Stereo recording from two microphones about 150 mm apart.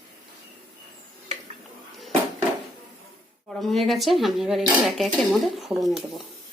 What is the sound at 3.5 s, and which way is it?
Speech, centre (ahead or behind).